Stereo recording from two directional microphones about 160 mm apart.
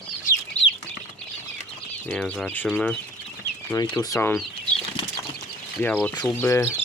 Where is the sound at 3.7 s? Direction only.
25° left (ahead or behind).